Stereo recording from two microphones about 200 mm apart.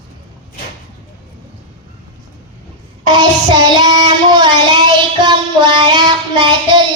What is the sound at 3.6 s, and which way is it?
Child singing, 20° right (ahead or behind).